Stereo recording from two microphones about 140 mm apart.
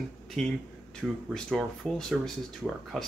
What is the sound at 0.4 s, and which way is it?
Speech, 5° left (ahead or behind).